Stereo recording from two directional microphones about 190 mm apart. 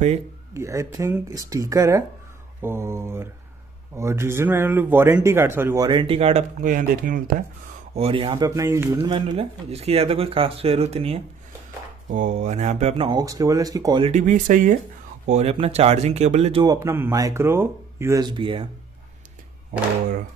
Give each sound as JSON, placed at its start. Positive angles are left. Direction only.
{"t": 0.6, "sound": "speech", "side_deg": -15}
{"t": 5.9, "sound": "speech", "side_deg": -25}
{"t": 6.6, "sound": "speech", "side_deg": -45}
{"t": 7.9, "sound": "speech", "side_deg": -30}
{"t": 9.1, "sound": "speech", "side_deg": -30}
{"t": 13.2, "sound": "speech", "side_deg": -20}
{"t": 14.1, "sound": "speech", "side_deg": -45}
{"t": 15.2, "sound": "speech", "side_deg": -35}
{"t": 16.6, "sound": "speech", "side_deg": -20}